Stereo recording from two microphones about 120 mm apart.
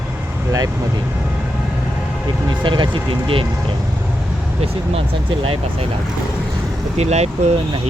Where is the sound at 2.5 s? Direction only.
40° right (ahead or behind).